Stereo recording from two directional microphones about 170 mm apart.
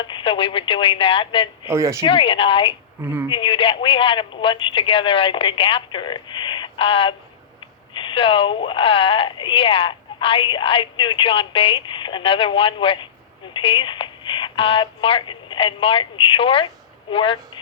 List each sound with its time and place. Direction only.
0.1 s speech: 30° left (ahead or behind)
1.6 s speech: 15° right (ahead or behind)
2.0 s speech: 30° left (ahead or behind)
3.0 s speech: 10° right (ahead or behind)
3.2 s speech: 30° left (ahead or behind)